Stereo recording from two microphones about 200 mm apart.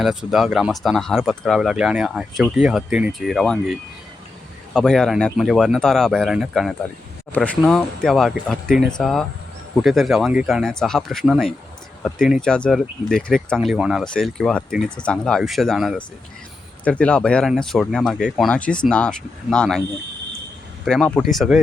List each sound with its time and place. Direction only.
0.0 s speech: centre (ahead or behind)
20.8 s speech: centre (ahead or behind)